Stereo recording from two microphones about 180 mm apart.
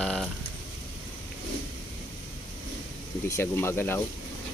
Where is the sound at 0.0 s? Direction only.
5° left (ahead or behind).